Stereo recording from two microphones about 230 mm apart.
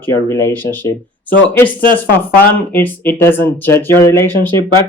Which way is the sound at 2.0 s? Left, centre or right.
Centre.